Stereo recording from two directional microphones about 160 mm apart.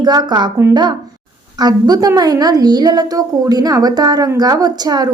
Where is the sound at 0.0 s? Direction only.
25° right (ahead or behind).